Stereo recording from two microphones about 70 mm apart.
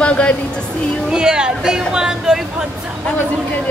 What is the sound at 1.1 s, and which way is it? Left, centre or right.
Speech, centre.